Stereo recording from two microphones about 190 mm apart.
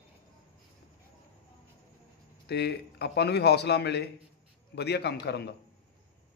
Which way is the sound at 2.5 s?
60° left (ahead or behind).